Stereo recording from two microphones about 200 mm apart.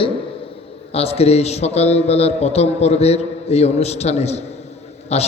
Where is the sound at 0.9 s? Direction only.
30° left (ahead or behind).